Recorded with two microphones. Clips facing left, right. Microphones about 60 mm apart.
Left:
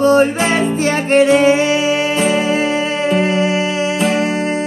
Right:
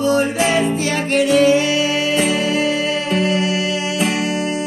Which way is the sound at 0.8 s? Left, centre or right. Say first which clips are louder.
Left 5 dB; left.